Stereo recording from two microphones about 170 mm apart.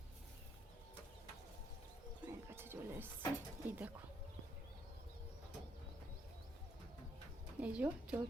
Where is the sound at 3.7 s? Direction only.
10° right (ahead or behind).